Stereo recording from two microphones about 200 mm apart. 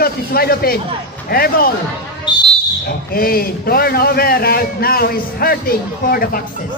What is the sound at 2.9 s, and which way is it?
A man's voice, 50° left (ahead or behind).